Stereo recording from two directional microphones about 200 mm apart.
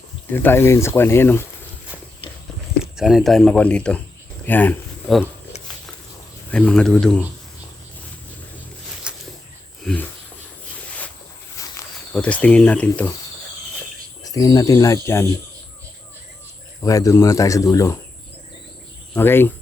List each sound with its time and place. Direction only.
0.3 s speech: 10° left (ahead or behind)
2.9 s speech: centre (ahead or behind)
6.5 s speech: 5° left (ahead or behind)
9.1 s a sound: 5° right (ahead or behind)
9.8 s speech: 5° left (ahead or behind)
11.6 s walk: 15° left (ahead or behind)
12.1 s speech: 5° left (ahead or behind)
14.3 s speech: 20° left (ahead or behind)
16.8 s speech: 15° left (ahead or behind)
19.1 s speech: 10° left (ahead or behind)